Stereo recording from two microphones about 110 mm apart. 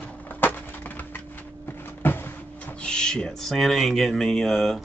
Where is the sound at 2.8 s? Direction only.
10° left (ahead or behind).